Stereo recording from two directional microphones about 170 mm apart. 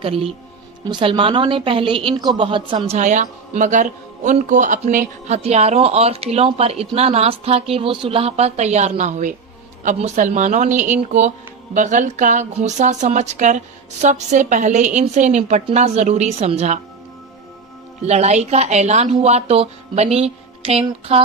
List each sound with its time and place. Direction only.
0.0 s a man's voice: 35° right (ahead or behind)
3.0 s a man's voice: 45° right (ahead or behind)
18.0 s a man's voice: 40° right (ahead or behind)